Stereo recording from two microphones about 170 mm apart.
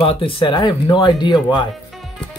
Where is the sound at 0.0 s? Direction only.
35° left (ahead or behind).